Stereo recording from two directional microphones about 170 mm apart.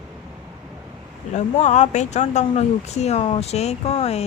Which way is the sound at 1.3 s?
45° left (ahead or behind).